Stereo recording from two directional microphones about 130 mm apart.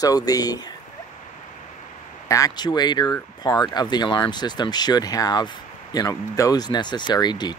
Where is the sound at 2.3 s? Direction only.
25° left (ahead or behind).